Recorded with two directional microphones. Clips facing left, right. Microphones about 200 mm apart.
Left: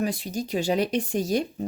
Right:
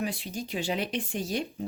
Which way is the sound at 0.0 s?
40° left (ahead or behind).